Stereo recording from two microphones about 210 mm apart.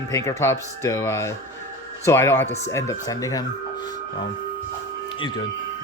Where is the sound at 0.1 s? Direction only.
15° left (ahead or behind).